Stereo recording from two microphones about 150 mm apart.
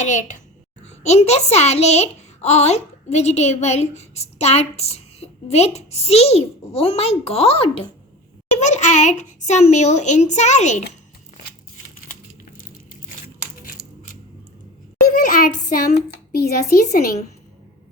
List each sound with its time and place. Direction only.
0.0 s a child's voice: 55° left (ahead or behind)
15.1 s child singing: 80° left
16.3 s a woman's voice: 90° left